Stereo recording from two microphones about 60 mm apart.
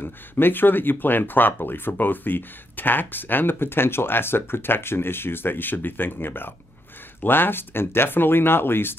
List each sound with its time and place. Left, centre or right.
0.0 s speech: left